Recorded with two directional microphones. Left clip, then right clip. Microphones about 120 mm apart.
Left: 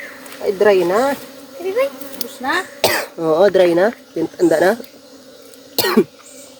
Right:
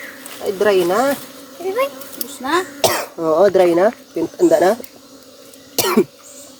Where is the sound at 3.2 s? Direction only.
25° left (ahead or behind).